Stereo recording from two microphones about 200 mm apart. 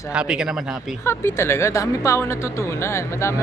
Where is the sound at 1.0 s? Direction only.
15° left (ahead or behind).